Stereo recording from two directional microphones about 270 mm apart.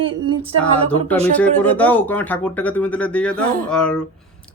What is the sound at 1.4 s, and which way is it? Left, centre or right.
A man's voice, centre.